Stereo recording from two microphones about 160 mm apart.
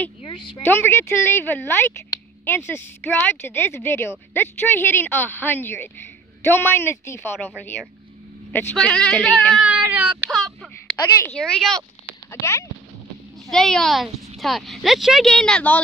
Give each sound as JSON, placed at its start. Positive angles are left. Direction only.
{"t": 0.2, "sound": "speech", "side_deg": 30}
{"t": 0.7, "sound": "a woman's voice", "side_deg": 15}
{"t": 7.2, "sound": "speech", "side_deg": 0}
{"t": 8.5, "sound": "speech", "side_deg": 10}
{"t": 9.6, "sound": "meow", "side_deg": -10}
{"t": 10.3, "sound": "a sound", "side_deg": 0}
{"t": 11.1, "sound": "speech", "side_deg": 10}
{"t": 12.3, "sound": "a woman's voice", "side_deg": 15}
{"t": 13.5, "sound": "speech", "side_deg": 5}